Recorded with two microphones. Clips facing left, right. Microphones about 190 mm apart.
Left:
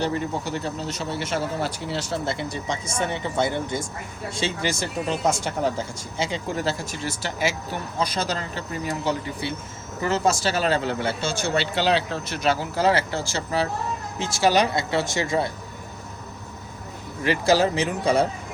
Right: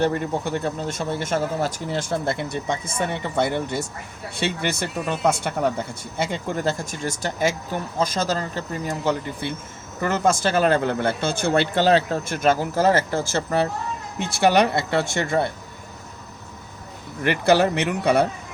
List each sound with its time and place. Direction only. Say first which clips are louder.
0.0 s speech: right 3 dB; 55° right (ahead or behind)
17.2 s speech: right 2 dB; 60° right (ahead or behind)